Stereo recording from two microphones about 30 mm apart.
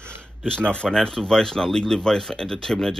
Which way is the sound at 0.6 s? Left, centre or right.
Left.